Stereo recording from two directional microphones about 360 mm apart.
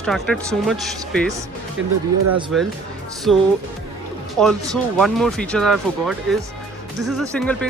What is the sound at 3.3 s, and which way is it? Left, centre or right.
Speech, centre.